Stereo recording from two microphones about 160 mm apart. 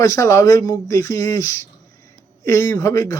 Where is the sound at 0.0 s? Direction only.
20° left (ahead or behind).